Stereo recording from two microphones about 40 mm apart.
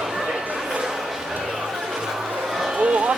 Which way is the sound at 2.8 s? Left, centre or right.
Right.